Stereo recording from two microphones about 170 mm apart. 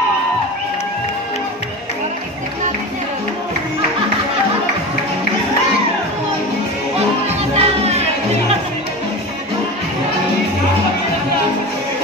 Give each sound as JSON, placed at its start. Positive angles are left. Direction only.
{"t": 7.2, "sound": "music", "side_deg": -40}